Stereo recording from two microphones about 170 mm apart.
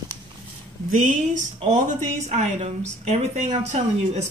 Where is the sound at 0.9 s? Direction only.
50° right (ahead or behind).